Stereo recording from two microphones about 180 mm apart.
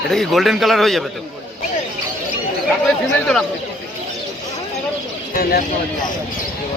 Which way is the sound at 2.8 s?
5° left (ahead or behind).